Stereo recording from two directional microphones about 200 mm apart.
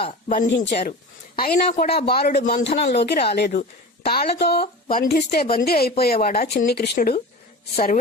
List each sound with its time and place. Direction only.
0.0 s speech: 40° left (ahead or behind)
1.4 s speech: 50° left (ahead or behind)
2.6 s speech: 30° left (ahead or behind)
2.9 s speech: 55° left (ahead or behind)